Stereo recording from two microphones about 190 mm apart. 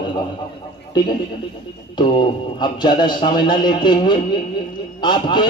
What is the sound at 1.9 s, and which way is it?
A man's voice, 25° left (ahead or behind).